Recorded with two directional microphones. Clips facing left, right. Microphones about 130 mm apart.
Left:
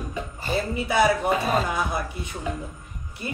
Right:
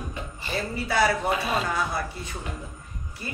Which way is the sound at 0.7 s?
20° left (ahead or behind).